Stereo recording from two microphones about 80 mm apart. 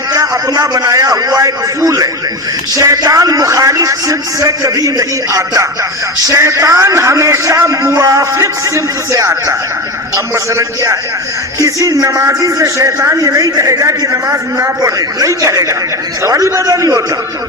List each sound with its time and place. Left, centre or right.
0.1 s a man's voice: right